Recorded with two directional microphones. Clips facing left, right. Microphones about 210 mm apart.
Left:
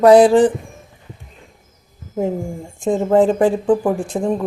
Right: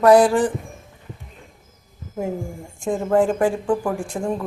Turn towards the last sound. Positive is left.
turn(degrees=20)  # may be behind; listen again after turning